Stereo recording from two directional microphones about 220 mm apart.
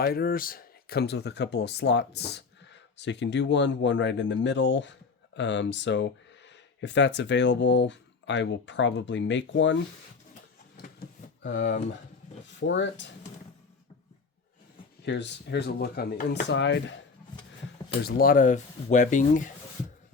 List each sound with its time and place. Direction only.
0.0 s speech: 45° left (ahead or behind)
10.8 s a sound: 45° left (ahead or behind)
12.5 s speech: 55° left (ahead or behind)
15.0 s speech: 50° left (ahead or behind)
16.5 s speech: 55° left (ahead or behind)
18.0 s speech: 40° left (ahead or behind)